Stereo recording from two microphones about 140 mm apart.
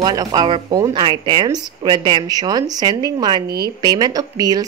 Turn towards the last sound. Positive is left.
turn(degrees=-25)  # may be behind; listen again after turning